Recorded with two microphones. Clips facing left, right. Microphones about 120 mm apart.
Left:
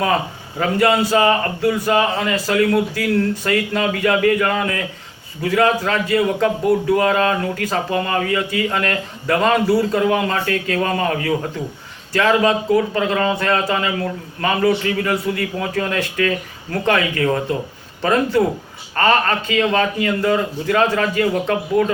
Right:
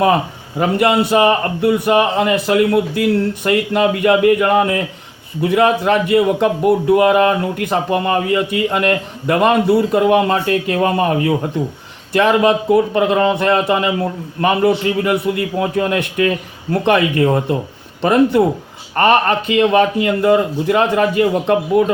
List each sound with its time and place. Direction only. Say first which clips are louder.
0.6 s a man's voice: right 2 dB; 20° right (ahead or behind)